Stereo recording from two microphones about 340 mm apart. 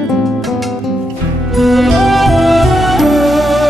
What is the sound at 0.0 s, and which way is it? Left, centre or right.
Music, centre.